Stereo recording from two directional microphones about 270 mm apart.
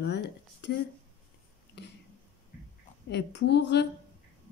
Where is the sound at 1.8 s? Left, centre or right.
Left.